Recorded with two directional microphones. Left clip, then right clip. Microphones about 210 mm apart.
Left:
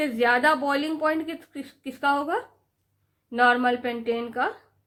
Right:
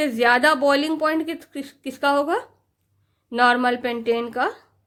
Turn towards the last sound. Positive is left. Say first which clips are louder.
# right 4 dB
turn(degrees=-45)  # may be behind; listen again after turning